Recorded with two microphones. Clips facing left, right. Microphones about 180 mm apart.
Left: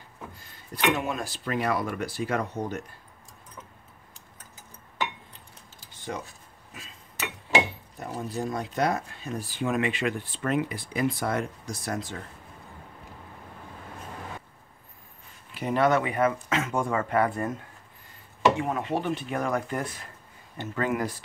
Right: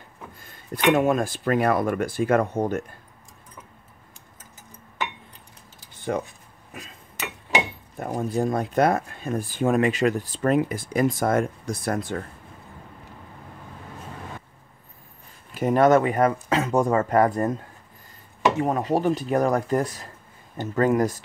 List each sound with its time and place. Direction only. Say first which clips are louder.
0.9 s speech: right 10 dB; 50° right (ahead or behind)
6.1 s speech: right 9 dB; 60° right (ahead or behind)
8.0 s speech: right 7 dB; 50° right (ahead or behind)
15.5 s speech: right 6 dB; 45° right (ahead or behind)
18.6 s speech: right 6 dB; 40° right (ahead or behind)